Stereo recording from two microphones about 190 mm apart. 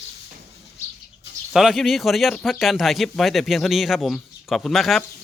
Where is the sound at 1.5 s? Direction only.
Centre (ahead or behind).